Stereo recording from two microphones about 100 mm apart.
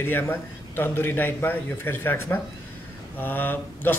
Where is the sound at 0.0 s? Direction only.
20° left (ahead or behind).